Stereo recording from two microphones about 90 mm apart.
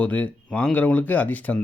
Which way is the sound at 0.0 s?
15° left (ahead or behind).